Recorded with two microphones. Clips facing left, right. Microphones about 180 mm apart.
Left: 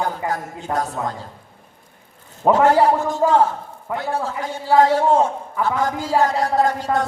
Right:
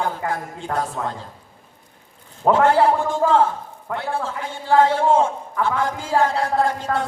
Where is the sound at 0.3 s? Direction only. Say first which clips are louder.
Left 1 dB; 40° left (ahead or behind).